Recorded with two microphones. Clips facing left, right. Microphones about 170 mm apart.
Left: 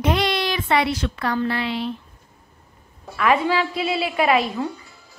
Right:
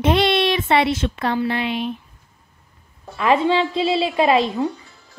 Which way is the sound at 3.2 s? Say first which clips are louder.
Right 2 dB; 25° right (ahead or behind).